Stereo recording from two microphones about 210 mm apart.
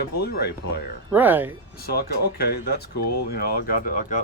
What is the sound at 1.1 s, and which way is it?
Speech, 10° right (ahead or behind).